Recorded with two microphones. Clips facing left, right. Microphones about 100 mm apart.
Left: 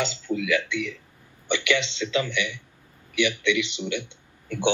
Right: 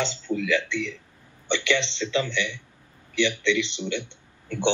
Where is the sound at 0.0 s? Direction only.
15° left (ahead or behind).